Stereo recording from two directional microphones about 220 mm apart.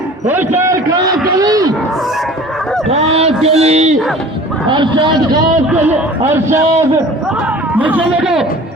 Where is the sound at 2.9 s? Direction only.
30° right (ahead or behind).